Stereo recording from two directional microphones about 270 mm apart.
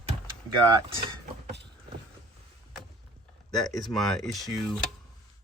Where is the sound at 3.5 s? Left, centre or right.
Centre.